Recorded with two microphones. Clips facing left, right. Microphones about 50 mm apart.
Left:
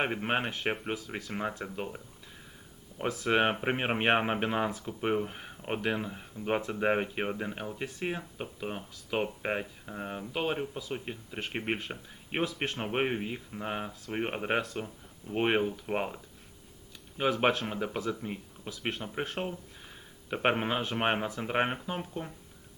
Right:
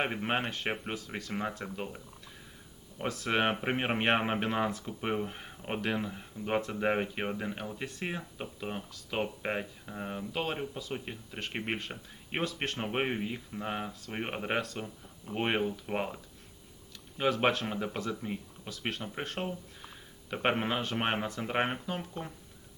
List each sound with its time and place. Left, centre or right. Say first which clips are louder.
0.0 s speech: left 1 dB; centre
3.0 s speech: left 3 dB; centre